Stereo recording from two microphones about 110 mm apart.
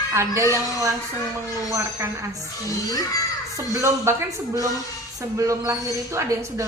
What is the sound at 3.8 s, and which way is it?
Speech, 25° right (ahead or behind).